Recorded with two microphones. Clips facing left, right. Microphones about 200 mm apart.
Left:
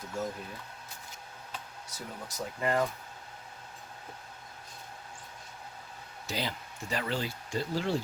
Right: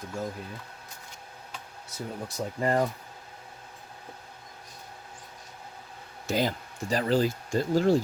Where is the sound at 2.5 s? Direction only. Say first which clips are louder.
Right 3 dB; 35° right (ahead or behind).